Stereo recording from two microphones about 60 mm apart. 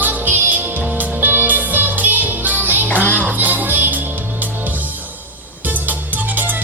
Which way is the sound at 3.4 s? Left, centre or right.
Right.